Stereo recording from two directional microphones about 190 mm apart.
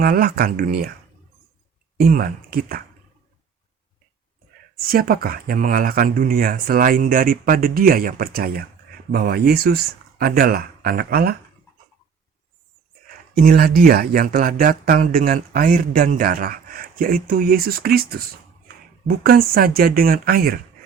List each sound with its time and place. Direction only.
0.0 s speech: 50° right (ahead or behind)
2.0 s speech: 50° right (ahead or behind)
4.9 s speech: 50° right (ahead or behind)
13.3 s speech: 50° right (ahead or behind)